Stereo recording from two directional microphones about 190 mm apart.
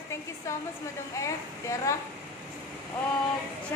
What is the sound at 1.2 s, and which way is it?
Speech, 15° left (ahead or behind).